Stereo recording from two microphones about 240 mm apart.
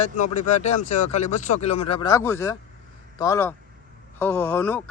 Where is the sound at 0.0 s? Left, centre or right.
Left.